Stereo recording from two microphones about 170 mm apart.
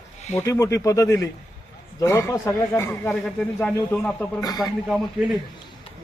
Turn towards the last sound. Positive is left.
turn(degrees=0)  # may be behind; listen again after turning